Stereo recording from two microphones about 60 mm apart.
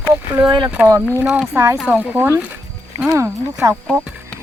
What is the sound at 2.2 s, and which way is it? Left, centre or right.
Speech, right.